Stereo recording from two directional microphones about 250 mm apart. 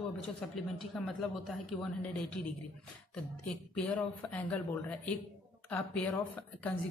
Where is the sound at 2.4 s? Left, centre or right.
Centre.